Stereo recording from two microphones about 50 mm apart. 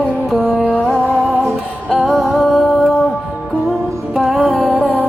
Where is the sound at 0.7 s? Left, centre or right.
Left.